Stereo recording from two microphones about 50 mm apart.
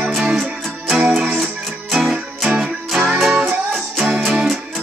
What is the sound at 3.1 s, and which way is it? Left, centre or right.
Music, centre.